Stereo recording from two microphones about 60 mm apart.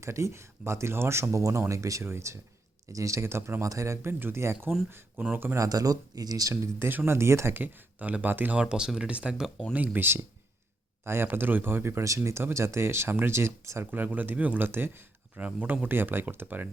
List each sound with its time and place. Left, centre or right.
0.0 s speech: right
2.0 s speech: right
2.9 s speech: right
3.7 s speech: right
4.2 s speech: right
5.5 s speech: right
7.6 s speech: right
9.0 s speech: centre
9.7 s speech: right
13.9 s speech: right
14.7 s speech: right
15.4 s speech: right